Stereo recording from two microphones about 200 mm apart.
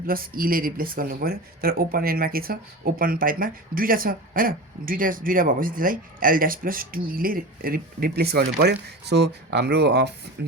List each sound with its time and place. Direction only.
0.0 s speech: 45° right (ahead or behind)